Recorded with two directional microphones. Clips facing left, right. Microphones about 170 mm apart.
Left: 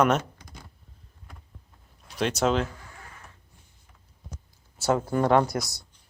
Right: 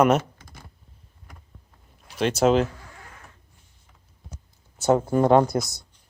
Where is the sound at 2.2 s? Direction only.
Centre (ahead or behind).